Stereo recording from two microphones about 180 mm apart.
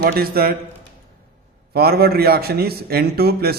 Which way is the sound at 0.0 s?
55° right (ahead or behind).